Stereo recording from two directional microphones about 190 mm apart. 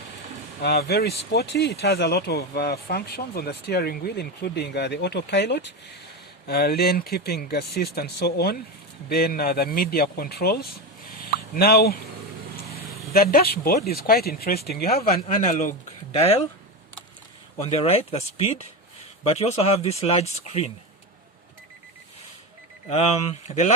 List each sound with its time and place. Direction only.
0.6 s speech: 60° left (ahead or behind)
11.2 s a sound: 50° left (ahead or behind)
13.3 s speech: 50° left (ahead or behind)
15.4 s speech: 40° left (ahead or behind)
17.6 s speech: 35° left (ahead or behind)
22.9 s speech: 35° left (ahead or behind)